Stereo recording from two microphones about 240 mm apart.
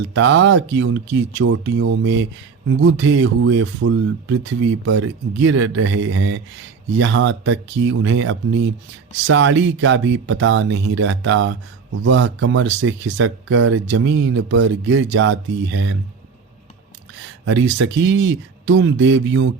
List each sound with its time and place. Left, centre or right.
0.0 s speech: right
17.4 s speech: right